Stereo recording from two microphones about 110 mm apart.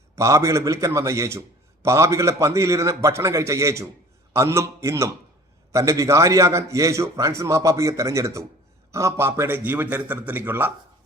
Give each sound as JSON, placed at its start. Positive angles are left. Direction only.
{"t": 0.2, "sound": "a man's voice", "side_deg": -30}